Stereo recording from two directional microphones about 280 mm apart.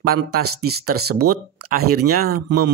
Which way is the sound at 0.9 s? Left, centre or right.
Right.